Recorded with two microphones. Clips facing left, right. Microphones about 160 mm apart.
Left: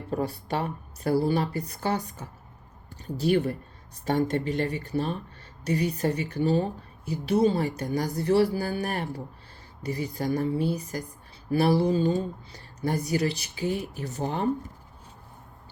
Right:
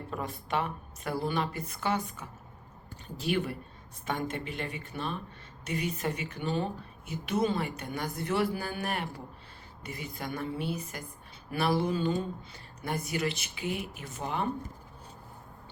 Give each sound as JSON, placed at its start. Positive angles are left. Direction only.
{"t": 0.1, "sound": "speech", "side_deg": 35}